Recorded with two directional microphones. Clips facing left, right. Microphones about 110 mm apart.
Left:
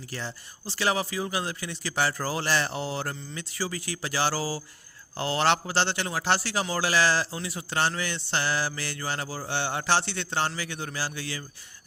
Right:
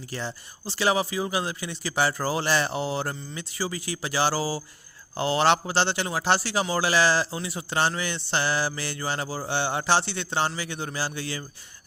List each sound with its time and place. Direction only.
0.1 s a man's voice: 20° right (ahead or behind)